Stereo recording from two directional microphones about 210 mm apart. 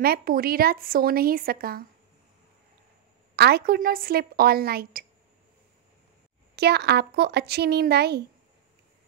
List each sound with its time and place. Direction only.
0.0 s a woman's voice: 45° right (ahead or behind)
3.3 s a woman's voice: 50° right (ahead or behind)
6.5 s a woman's voice: 50° right (ahead or behind)